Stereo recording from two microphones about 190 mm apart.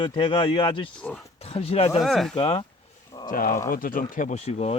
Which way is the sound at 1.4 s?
30° left (ahead or behind).